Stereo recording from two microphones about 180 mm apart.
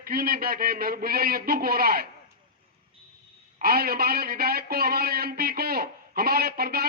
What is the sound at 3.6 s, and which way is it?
A man's voice, 55° right (ahead or behind).